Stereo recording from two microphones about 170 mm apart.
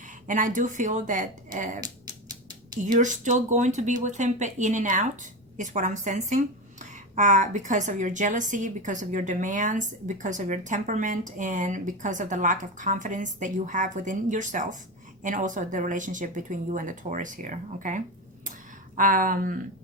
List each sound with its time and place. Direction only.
0.0 s speech: 50° right (ahead or behind)
2.8 s speech: 45° right (ahead or behind)